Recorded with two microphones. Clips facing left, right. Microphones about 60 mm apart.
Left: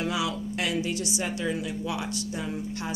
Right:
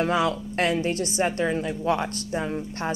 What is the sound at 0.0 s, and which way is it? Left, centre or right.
A woman's voice, right.